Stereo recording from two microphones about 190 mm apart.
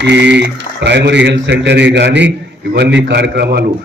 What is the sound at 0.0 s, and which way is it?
A man's voice, 65° right (ahead or behind).